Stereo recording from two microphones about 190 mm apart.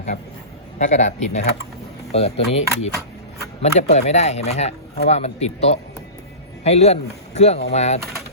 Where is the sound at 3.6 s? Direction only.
35° left (ahead or behind).